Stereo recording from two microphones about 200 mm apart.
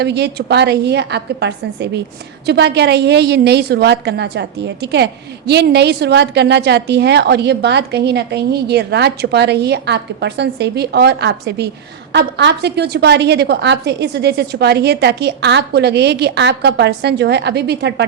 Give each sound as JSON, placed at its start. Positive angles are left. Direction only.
{"t": 0.0, "sound": "a woman's voice", "side_deg": -55}